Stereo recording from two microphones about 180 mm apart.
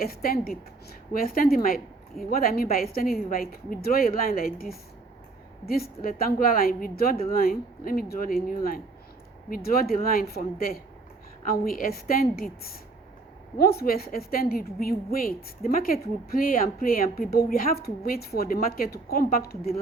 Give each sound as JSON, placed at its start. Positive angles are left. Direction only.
{"t": 0.0, "sound": "a woman's voice", "side_deg": 55}